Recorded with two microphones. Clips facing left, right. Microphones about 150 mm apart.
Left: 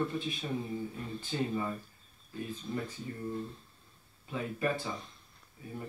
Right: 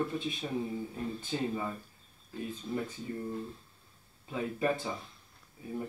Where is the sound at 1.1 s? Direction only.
15° right (ahead or behind).